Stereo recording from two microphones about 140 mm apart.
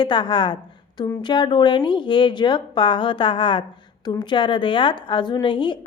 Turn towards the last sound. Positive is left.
turn(degrees=35)  # may be behind; listen again after turning